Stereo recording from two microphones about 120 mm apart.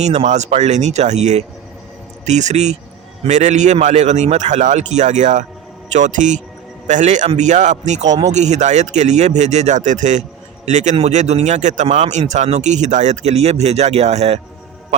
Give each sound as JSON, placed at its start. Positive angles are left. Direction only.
{"t": 0.0, "sound": "a man's voice", "side_deg": -65}
{"t": 7.3, "sound": "speech", "side_deg": -80}
{"t": 10.9, "sound": "speech", "side_deg": -70}